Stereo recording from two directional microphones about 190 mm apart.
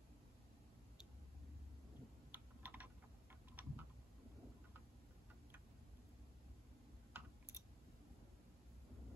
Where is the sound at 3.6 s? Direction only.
5° right (ahead or behind).